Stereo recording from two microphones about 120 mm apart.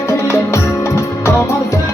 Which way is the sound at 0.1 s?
25° left (ahead or behind).